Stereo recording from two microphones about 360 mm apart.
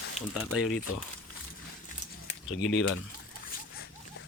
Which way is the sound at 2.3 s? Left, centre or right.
Left.